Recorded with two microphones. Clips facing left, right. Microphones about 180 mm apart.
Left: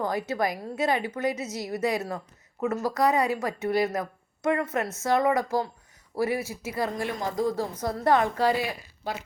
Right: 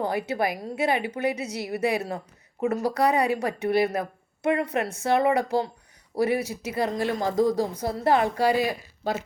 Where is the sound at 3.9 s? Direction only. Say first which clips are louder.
Right 2 dB; 25° right (ahead or behind).